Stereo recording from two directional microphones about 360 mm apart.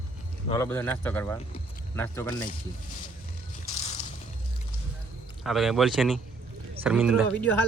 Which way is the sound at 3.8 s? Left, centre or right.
Centre.